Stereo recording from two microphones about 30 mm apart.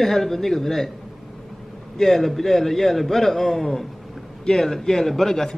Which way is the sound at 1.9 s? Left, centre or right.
Centre.